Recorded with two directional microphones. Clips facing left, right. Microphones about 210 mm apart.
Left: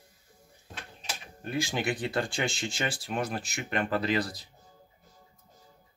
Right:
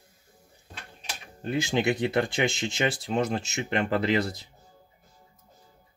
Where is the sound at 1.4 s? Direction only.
25° right (ahead or behind).